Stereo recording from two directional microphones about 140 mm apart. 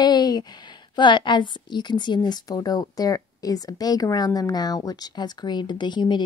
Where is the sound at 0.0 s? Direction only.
30° left (ahead or behind).